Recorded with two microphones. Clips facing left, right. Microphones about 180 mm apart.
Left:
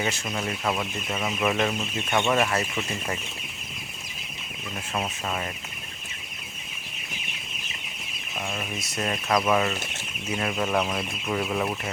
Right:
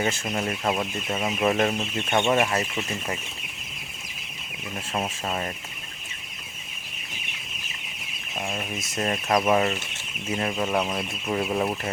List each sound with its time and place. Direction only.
0.3 s speech: 35° right (ahead or behind)
4.9 s speech: 30° right (ahead or behind)
9.0 s speech: 35° right (ahead or behind)
10.6 s speech: 15° right (ahead or behind)
11.3 s speech: 30° right (ahead or behind)